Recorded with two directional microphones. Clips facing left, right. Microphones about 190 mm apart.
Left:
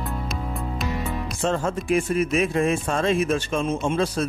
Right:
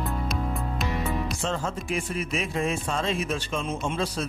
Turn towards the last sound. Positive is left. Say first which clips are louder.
# left 5 dB
turn(degrees=50)  # may be behind; listen again after turning